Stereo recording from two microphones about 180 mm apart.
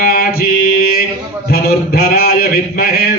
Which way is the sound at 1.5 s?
55° left (ahead or behind).